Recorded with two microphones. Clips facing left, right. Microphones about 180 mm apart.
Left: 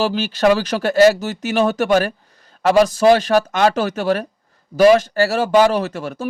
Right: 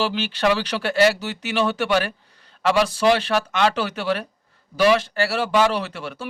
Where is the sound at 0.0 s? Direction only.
40° left (ahead or behind).